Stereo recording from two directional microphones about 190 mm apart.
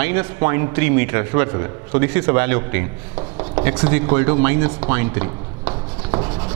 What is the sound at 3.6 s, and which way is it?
A man's voice, 10° right (ahead or behind).